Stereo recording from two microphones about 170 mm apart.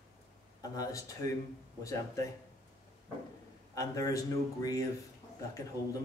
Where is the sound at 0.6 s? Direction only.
20° left (ahead or behind).